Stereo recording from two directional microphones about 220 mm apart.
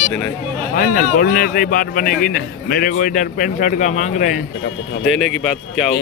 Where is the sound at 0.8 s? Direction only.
40° left (ahead or behind).